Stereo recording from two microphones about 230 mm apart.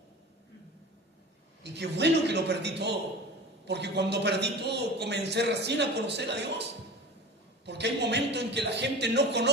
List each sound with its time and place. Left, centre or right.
1.6 s a man's voice: right